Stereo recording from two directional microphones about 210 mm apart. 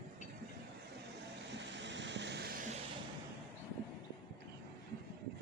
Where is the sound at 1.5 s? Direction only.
55° right (ahead or behind).